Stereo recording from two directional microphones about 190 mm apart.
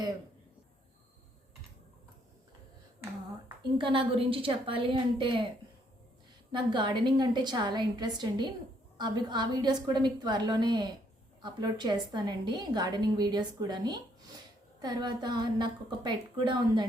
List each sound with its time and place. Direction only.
3.8 s a woman's voice: 25° right (ahead or behind)
6.5 s a woman's voice: 25° right (ahead or behind)